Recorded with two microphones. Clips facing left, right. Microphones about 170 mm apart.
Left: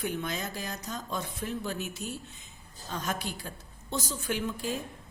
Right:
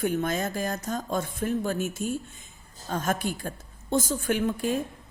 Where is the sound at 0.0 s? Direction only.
50° right (ahead or behind).